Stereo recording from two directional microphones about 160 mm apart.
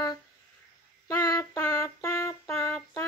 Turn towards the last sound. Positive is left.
turn(degrees=15)  # may be behind; listen again after turning